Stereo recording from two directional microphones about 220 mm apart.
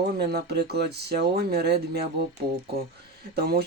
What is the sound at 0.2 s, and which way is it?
Speech, 45° right (ahead or behind).